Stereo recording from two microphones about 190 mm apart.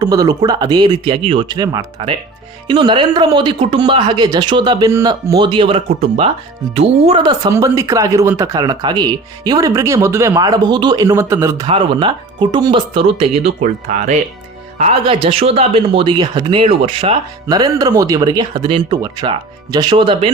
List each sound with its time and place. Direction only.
0.0 s speech: 20° right (ahead or behind)
11.6 s speech: 25° right (ahead or behind)